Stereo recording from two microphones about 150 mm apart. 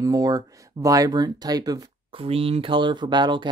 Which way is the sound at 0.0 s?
25° right (ahead or behind).